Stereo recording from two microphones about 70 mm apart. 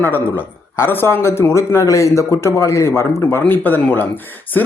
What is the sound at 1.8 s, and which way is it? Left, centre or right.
A man's voice, left.